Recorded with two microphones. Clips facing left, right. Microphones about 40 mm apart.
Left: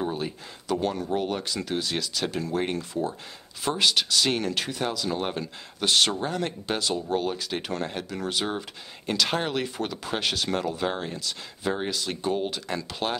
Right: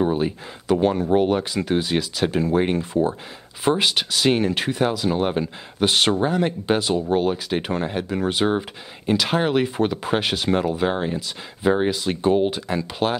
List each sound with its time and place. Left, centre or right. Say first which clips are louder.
0.0 s speech: right 8 dB; right
9.0 s speech: right 6 dB; centre
12.6 s speech: right 6 dB; centre